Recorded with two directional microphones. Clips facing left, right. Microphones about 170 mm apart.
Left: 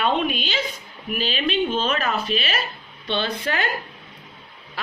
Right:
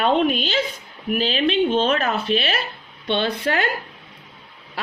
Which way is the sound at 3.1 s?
55° right (ahead or behind).